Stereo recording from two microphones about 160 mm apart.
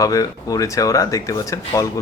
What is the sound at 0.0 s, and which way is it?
Speech, 20° left (ahead or behind).